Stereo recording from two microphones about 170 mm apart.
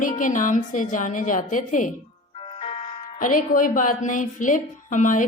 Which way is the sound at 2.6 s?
35° left (ahead or behind).